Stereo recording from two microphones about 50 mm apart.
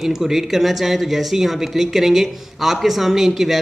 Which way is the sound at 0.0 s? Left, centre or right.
Centre.